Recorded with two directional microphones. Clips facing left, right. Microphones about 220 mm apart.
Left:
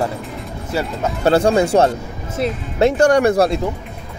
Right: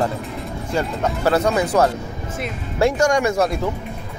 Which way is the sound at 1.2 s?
30° left (ahead or behind).